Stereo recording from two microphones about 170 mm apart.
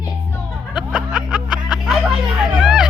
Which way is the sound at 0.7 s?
5° right (ahead or behind).